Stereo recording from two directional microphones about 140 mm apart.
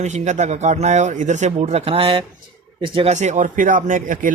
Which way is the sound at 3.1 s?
60° right (ahead or behind).